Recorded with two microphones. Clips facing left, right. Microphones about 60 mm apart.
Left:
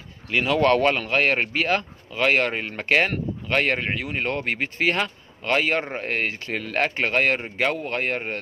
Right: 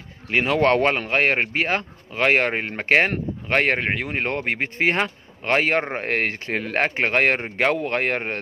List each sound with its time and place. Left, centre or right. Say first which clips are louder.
0.3 s speech: right 1 dB; right